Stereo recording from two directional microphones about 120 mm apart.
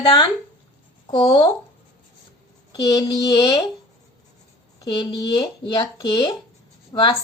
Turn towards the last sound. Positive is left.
turn(degrees=35)  # may be behind; listen again after turning